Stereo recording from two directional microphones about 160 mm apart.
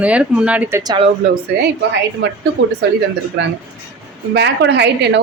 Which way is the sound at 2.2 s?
90° right.